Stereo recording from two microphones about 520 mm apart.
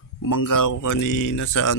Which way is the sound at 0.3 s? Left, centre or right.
Left.